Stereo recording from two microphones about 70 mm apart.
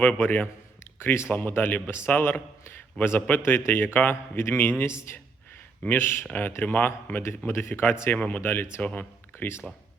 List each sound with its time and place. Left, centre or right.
0.0 s a man's voice: left
8.1 s a man's voice: left